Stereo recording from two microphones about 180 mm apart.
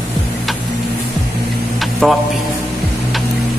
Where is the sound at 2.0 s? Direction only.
Centre (ahead or behind).